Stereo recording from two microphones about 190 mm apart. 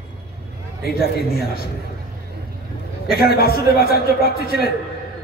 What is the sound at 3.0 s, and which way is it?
A man's voice, 55° left (ahead or behind).